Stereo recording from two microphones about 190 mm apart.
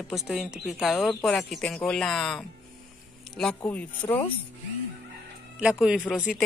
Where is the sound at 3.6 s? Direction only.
10° left (ahead or behind).